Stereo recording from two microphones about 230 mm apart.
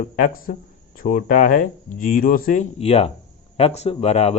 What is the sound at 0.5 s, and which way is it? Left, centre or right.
Speech, left.